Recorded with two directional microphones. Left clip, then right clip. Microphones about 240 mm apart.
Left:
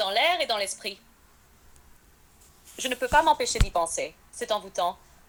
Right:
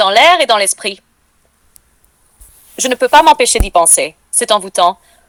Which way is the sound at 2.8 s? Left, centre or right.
Right.